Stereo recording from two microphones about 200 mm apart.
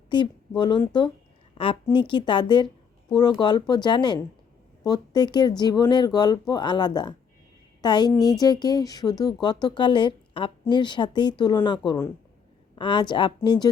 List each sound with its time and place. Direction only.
0.1 s a woman's voice: 20° left (ahead or behind)
12.7 s speech: 25° left (ahead or behind)